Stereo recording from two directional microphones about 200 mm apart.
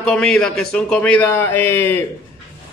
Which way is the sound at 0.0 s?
5° left (ahead or behind).